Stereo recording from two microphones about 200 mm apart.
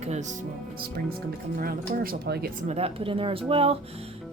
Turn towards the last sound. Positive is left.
turn(degrees=-25)  # may be behind; listen again after turning